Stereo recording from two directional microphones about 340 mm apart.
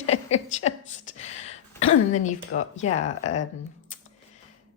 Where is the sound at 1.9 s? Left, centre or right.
Left.